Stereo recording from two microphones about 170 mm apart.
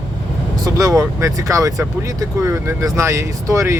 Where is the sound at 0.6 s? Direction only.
20° right (ahead or behind).